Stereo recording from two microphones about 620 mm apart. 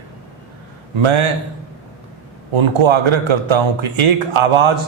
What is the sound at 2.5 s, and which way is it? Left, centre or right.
Speech, right.